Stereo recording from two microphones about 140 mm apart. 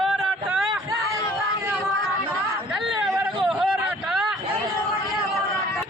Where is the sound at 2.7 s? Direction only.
5° right (ahead or behind).